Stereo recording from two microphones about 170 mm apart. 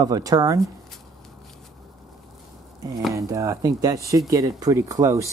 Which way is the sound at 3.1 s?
20° right (ahead or behind).